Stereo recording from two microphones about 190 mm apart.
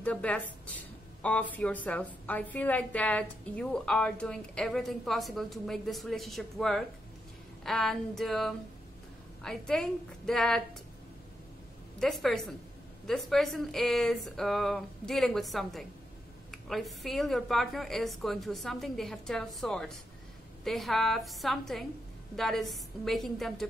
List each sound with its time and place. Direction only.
0.0 s a woman's voice: 5° left (ahead or behind)
12.0 s a woman's voice: centre (ahead or behind)